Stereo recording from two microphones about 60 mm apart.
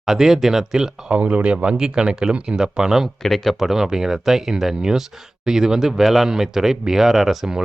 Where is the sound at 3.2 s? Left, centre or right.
Centre.